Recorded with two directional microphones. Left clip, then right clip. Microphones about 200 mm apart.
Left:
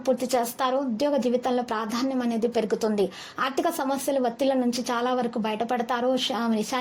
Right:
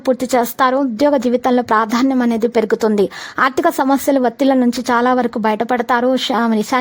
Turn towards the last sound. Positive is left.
turn(degrees=-45)  # may be behind; listen again after turning